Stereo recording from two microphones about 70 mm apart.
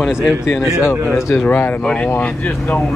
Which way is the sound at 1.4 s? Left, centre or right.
Left.